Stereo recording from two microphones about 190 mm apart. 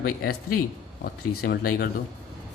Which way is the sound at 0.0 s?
55° left (ahead or behind).